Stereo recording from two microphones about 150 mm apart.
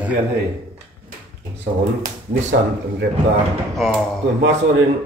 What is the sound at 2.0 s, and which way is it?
Speech, 60° right (ahead or behind).